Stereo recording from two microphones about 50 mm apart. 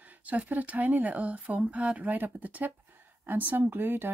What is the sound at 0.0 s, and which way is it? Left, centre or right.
Speech, right.